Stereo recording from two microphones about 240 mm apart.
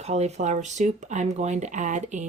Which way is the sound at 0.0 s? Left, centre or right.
Right.